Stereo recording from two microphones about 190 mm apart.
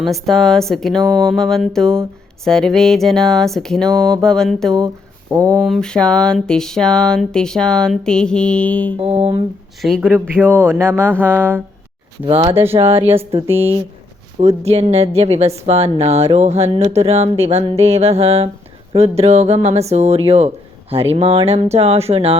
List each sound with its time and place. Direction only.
0.0 s a sound: centre (ahead or behind)
9.0 s a woman's voice: 30° right (ahead or behind)
9.8 s a sound: centre (ahead or behind)
10.2 s speech: 10° right (ahead or behind)
12.2 s a woman's voice: 30° right (ahead or behind)
14.4 s a woman's voice: 30° right (ahead or behind)